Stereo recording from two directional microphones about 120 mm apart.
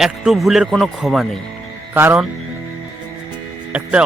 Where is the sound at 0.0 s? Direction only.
Centre (ahead or behind).